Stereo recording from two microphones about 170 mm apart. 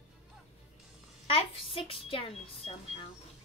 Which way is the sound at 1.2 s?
35° left (ahead or behind).